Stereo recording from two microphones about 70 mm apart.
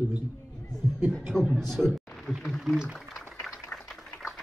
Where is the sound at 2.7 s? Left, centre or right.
Centre.